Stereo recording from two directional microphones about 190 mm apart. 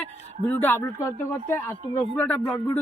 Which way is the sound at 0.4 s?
10° left (ahead or behind).